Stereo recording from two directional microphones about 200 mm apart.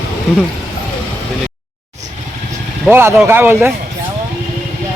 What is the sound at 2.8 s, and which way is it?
Speech, 10° right (ahead or behind).